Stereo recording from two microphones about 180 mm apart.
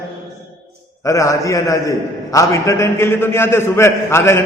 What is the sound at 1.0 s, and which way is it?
A man's voice, 15° left (ahead or behind).